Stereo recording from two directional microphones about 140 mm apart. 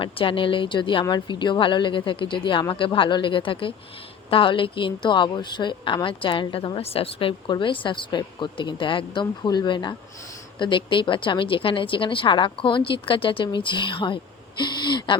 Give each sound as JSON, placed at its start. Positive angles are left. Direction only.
{"t": 0.0, "sound": "a woman's voice", "side_deg": 40}